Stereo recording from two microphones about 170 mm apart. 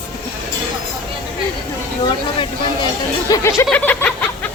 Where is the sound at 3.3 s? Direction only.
20° left (ahead or behind).